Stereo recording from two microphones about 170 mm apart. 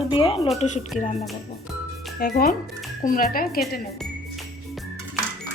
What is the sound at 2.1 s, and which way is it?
Speech, 60° left (ahead or behind).